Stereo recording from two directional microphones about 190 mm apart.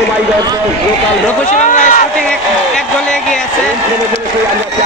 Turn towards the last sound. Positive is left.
turn(degrees=5)  # may be behind; listen again after turning